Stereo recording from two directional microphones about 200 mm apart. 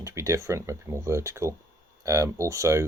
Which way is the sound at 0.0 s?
15° right (ahead or behind).